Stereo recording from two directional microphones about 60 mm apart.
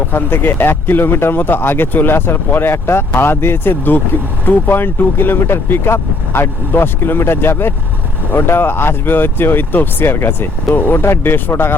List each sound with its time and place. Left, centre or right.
0.1 s speech: left